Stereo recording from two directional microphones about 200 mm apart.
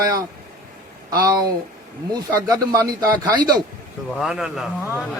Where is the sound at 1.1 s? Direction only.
20° right (ahead or behind).